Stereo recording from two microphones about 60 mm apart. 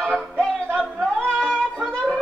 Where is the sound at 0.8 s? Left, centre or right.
Centre.